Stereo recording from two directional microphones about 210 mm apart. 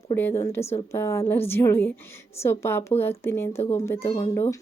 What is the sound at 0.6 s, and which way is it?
Speech, 30° left (ahead or behind).